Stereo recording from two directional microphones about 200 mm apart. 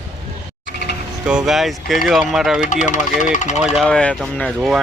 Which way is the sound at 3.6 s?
5° right (ahead or behind).